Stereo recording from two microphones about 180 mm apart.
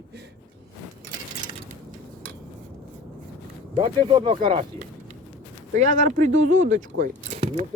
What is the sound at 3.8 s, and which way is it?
Speech, 30° right (ahead or behind).